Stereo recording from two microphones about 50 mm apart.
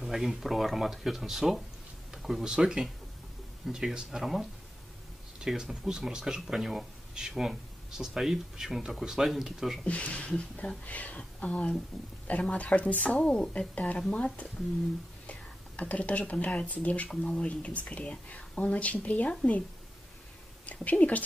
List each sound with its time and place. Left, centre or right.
0.0 s speech: centre
9.8 s speech: left
11.9 s speech: centre
12.3 s speech: left
13.2 s speech: centre
17.1 s speech: centre
20.6 s speech: left